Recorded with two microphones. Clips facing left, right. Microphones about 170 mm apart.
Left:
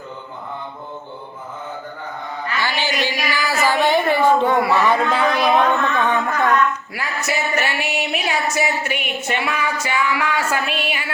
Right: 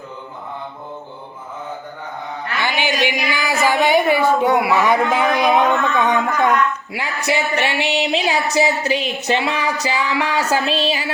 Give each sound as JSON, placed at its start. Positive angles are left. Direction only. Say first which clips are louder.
{"t": 2.6, "sound": "a woman's voice", "louder": "right 3 dB", "side_deg": -15}
{"t": 7.0, "sound": "music", "louder": "right 3 dB", "side_deg": -30}